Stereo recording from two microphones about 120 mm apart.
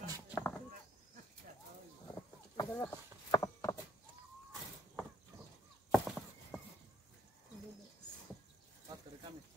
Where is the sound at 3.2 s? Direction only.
30° left (ahead or behind).